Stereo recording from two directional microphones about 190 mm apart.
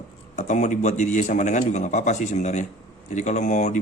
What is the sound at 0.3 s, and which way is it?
A man's voice, 40° left (ahead or behind).